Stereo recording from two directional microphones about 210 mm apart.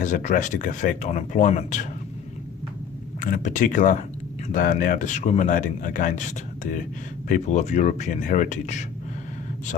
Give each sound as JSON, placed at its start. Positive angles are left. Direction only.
{"t": 0.0, "sound": "speech", "side_deg": 35}
{"t": 3.2, "sound": "speech", "side_deg": 40}